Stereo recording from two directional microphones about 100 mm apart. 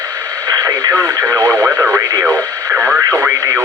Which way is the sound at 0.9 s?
25° right (ahead or behind).